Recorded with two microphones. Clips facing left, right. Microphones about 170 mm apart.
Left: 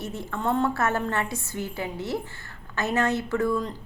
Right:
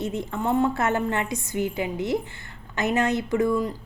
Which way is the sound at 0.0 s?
20° right (ahead or behind).